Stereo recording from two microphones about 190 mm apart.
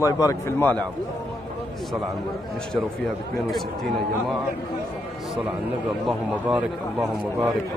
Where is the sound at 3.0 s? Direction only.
Centre (ahead or behind).